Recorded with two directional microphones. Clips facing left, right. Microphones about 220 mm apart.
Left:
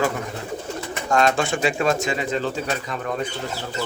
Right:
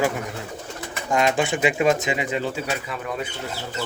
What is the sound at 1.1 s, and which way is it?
Speech, 15° right (ahead or behind).